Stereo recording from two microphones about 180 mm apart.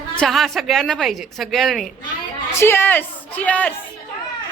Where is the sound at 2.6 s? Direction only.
15° left (ahead or behind).